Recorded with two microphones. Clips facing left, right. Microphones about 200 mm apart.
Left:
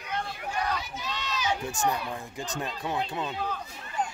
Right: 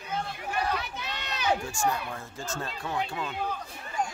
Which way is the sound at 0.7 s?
60° right (ahead or behind).